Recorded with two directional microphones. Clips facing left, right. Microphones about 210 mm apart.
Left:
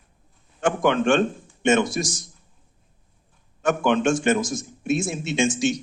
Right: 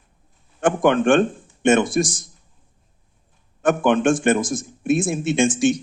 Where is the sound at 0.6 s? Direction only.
50° right (ahead or behind).